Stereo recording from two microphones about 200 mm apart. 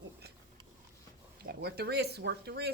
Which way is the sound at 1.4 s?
50° right (ahead or behind).